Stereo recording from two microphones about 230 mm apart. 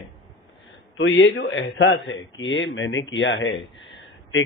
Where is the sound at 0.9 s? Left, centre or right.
Left.